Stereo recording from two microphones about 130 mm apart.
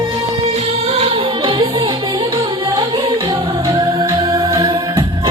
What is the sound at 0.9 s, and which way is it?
Music, 50° right (ahead or behind).